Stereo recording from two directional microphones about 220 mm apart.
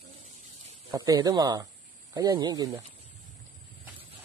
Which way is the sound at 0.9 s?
15° right (ahead or behind).